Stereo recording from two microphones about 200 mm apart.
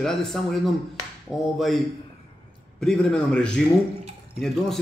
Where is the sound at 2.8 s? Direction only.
5° left (ahead or behind).